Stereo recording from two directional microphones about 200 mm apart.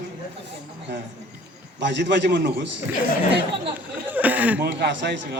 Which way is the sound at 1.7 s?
60° right (ahead or behind).